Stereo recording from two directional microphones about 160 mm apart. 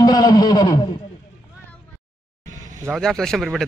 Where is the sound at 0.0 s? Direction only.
25° left (ahead or behind).